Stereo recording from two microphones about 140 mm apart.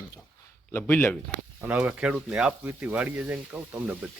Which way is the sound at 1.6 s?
10° right (ahead or behind).